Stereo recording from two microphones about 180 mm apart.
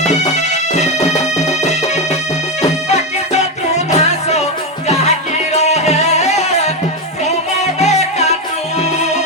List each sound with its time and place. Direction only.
0.0 s music: 40° left (ahead or behind)
7.6 s music: 40° left (ahead or behind)